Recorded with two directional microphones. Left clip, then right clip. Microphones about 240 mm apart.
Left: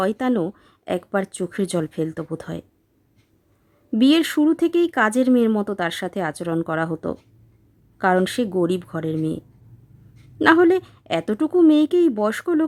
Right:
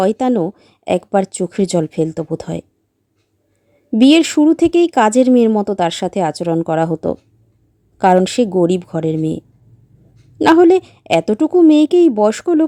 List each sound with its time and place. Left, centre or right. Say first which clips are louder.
0.0 s speech: right 7 dB; centre
4.1 s speech: right 7 dB; centre